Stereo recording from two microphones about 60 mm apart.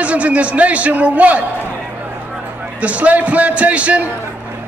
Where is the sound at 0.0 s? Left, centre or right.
Right.